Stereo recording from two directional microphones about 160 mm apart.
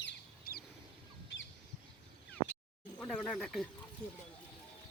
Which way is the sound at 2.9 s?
5° left (ahead or behind).